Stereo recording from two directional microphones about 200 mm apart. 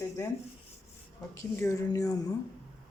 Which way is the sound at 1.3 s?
15° left (ahead or behind).